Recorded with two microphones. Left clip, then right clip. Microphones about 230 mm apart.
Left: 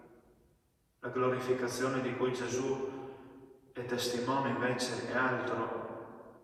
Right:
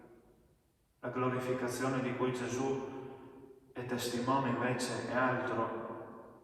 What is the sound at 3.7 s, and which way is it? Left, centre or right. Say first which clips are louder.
A man's voice: left 3 dB; left.